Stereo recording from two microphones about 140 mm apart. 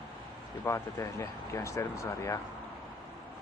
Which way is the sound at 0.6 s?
25° left (ahead or behind).